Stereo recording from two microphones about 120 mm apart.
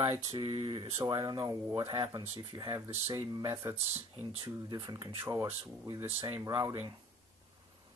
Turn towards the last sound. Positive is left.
turn(degrees=-25)  # may be behind; listen again after turning